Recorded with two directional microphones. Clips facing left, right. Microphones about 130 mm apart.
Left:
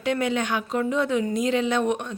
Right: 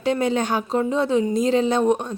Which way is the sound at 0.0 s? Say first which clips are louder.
Right 3 dB; 30° right (ahead or behind).